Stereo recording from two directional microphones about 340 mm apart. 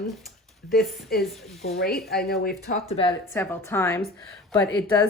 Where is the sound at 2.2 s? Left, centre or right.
Left.